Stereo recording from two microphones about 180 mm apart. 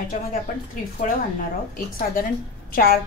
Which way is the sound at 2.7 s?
55° left (ahead or behind).